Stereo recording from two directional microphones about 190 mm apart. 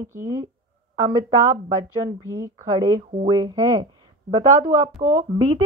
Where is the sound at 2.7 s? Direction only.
25° right (ahead or behind).